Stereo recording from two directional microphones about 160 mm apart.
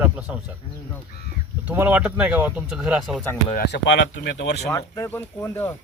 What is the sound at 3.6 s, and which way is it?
Speech, 90° left.